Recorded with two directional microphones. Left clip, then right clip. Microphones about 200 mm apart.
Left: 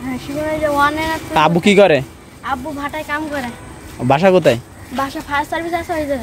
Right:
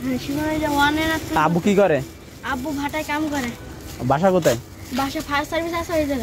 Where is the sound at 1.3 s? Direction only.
45° left (ahead or behind).